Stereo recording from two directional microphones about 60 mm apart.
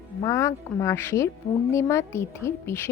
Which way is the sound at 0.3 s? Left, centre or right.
Left.